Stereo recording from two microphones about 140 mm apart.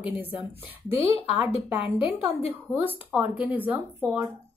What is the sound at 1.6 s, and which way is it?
Speech, 15° right (ahead or behind).